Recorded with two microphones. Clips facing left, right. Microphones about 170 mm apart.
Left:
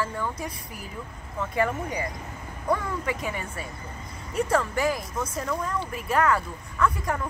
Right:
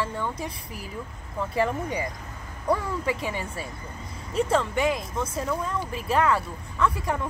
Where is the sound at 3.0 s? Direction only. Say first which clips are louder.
Right 2 dB; 30° right (ahead or behind).